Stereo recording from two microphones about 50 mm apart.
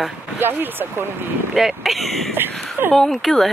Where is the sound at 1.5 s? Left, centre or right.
Centre.